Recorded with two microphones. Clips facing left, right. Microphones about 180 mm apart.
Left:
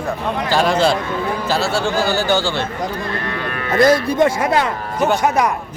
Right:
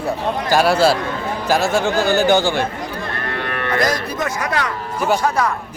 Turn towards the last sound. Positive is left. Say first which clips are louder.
# left 2 dB
turn(degrees=15)  # may be behind; listen again after turning